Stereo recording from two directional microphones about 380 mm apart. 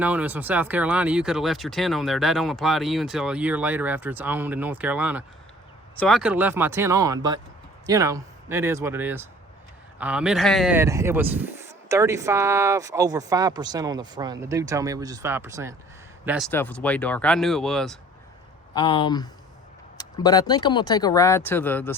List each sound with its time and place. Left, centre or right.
0.0 s speech: centre
18.7 s speech: centre